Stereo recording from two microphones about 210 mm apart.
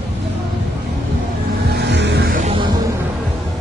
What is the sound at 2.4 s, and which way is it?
Music, 25° right (ahead or behind).